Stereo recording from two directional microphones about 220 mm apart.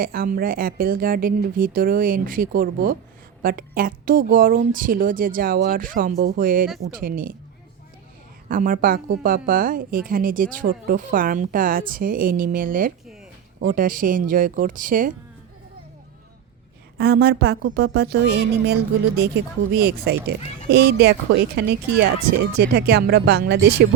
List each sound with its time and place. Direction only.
0.0 s speech: 40° right (ahead or behind)
8.4 s speech: 40° right (ahead or behind)
17.0 s speech: 45° right (ahead or behind)